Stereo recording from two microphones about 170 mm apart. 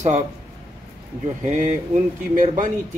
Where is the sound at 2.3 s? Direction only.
50° right (ahead or behind).